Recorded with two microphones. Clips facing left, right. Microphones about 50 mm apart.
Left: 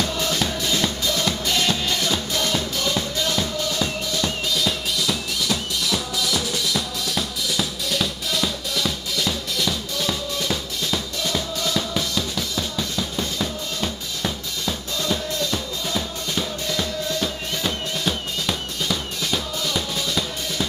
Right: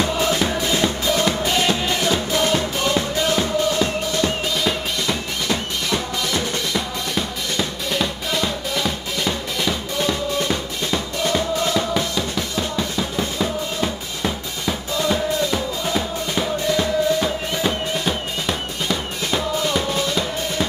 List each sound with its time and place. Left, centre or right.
0.0 s music: right
4.6 s music: centre